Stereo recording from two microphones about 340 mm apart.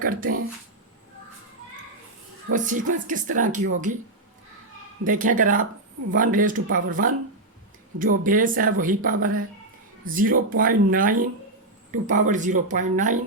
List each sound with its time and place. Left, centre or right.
0.0 s speech: right
2.5 s speech: right
5.0 s speech: right